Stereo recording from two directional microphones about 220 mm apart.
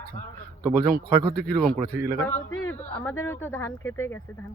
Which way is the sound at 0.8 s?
40° right (ahead or behind).